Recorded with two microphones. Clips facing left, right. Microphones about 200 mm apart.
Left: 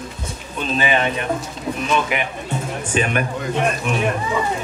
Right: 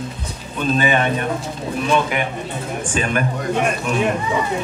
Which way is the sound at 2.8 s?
40° right (ahead or behind).